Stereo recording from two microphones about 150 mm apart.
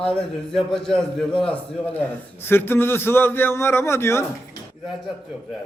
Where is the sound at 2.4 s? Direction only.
15° left (ahead or behind).